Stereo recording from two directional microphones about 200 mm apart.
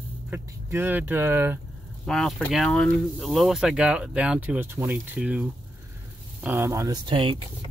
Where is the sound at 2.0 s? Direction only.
Centre (ahead or behind); by 7.4 s 25° right (ahead or behind).